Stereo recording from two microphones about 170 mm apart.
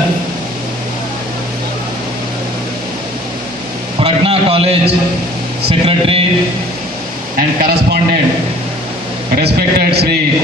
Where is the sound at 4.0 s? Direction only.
35° right (ahead or behind).